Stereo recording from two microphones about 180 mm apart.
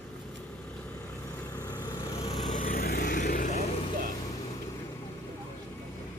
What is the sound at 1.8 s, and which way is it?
Vehicle, 25° left (ahead or behind).